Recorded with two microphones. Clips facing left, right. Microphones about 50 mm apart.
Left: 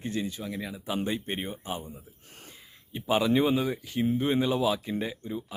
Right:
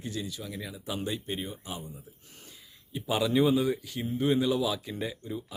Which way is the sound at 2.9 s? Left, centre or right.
Left.